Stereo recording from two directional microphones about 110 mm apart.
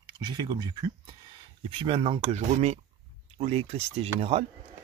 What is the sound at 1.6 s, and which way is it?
Speech, 55° right (ahead or behind).